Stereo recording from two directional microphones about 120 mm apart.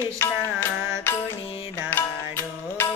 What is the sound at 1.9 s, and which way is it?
Music, 20° left (ahead or behind).